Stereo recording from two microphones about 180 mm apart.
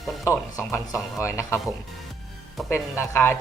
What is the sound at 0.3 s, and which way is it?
Speech, 15° left (ahead or behind).